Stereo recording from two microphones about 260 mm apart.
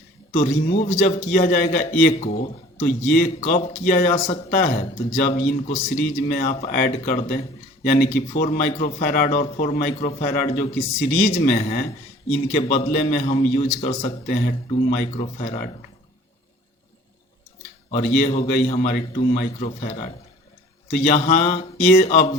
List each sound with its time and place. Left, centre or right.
0.3 s a man's voice: left
18.2 s a man's voice: left